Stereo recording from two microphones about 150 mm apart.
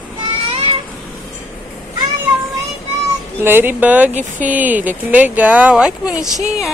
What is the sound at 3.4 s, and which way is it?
Speech, 15° right (ahead or behind).